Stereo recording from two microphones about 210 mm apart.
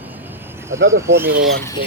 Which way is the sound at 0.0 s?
10° right (ahead or behind).